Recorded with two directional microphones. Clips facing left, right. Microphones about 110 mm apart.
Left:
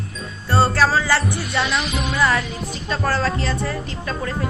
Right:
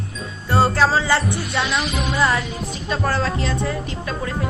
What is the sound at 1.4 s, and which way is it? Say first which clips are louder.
Music: even; centre (ahead or behind).